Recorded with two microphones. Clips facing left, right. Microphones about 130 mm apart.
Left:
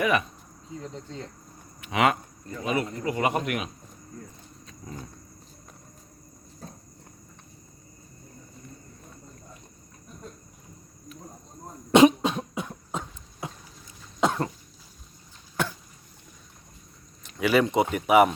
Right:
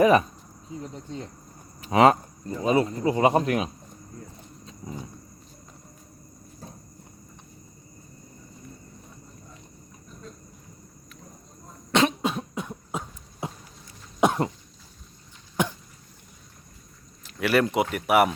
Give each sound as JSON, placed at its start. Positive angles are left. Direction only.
{"t": 0.0, "sound": "speech", "side_deg": -35}
{"t": 0.8, "sound": "cricket", "side_deg": -15}
{"t": 1.8, "sound": "speech", "side_deg": -35}
{"t": 4.8, "sound": "wild animals", "side_deg": -25}
{"t": 11.9, "sound": "cough", "side_deg": 15}
{"t": 12.2, "sound": "cough", "side_deg": 0}
{"t": 13.4, "sound": "boat", "side_deg": -25}
{"t": 14.2, "sound": "cough", "side_deg": -20}
{"t": 15.6, "sound": "cough", "side_deg": -20}
{"t": 17.2, "sound": "a sound", "side_deg": 0}
{"t": 17.9, "sound": "speech", "side_deg": 0}